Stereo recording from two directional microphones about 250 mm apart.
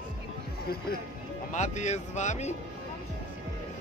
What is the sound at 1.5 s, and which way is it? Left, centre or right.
Speech, left.